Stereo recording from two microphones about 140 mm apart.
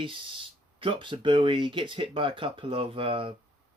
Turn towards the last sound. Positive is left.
turn(degrees=-40)  # may be behind; listen again after turning